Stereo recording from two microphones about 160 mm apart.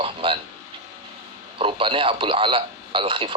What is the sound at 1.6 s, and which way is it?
Speech, 30° right (ahead or behind).